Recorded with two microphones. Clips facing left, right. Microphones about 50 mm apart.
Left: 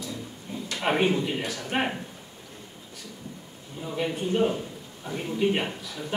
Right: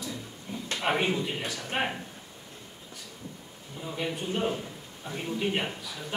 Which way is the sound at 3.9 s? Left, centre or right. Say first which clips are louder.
Left 4 dB; centre.